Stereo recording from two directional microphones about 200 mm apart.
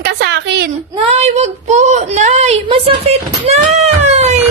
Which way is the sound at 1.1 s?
35° right (ahead or behind).